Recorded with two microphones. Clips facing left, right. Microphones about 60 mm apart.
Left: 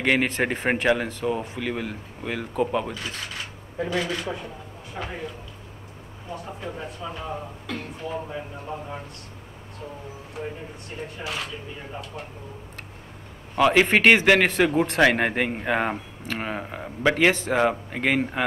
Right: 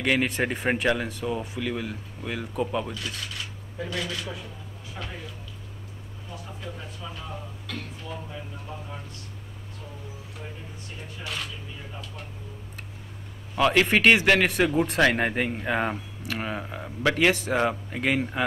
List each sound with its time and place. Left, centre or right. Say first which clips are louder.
0.0 s speech: left 2 dB; centre
2.6 s speech: left 4 dB; left
2.9 s a sound: left 2 dB; centre
3.8 s speech: left 5 dB; centre
6.3 s speech: left 5 dB; centre
8.2 s speech: left 5 dB; left
10.4 s speech: left 10 dB; centre
11.5 s speech: left 5 dB; centre
13.8 s speech: left 2 dB; centre
17.3 s speech: left 2 dB; centre
17.6 s speech: left 3 dB; centre